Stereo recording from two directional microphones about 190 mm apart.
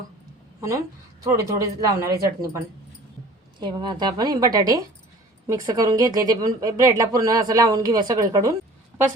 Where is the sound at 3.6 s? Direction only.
25° right (ahead or behind).